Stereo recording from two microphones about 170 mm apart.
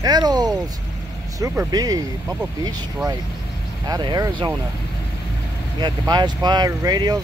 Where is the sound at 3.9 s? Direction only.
25° right (ahead or behind).